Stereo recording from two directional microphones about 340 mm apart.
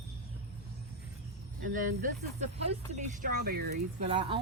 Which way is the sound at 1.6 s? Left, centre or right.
Right.